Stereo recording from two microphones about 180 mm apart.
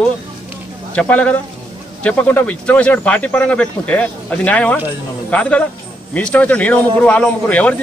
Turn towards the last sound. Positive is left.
turn(degrees=5)  # may be behind; listen again after turning